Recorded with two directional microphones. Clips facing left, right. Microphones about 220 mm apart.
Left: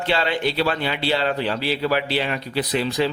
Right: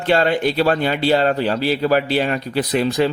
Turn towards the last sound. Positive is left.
turn(degrees=-50)  # may be behind; listen again after turning